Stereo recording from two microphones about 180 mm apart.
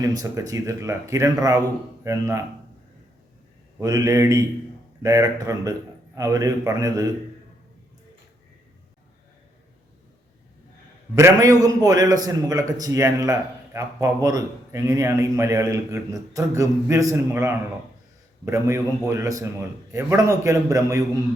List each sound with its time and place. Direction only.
0.0 s speech: 20° right (ahead or behind)
3.8 s a man's voice: 20° right (ahead or behind)
11.1 s a man's voice: 20° right (ahead or behind)